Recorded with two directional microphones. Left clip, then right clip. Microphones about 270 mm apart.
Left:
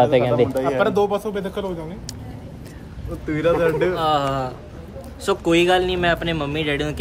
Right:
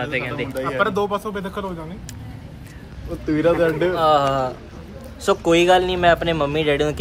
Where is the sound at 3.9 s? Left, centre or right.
Centre.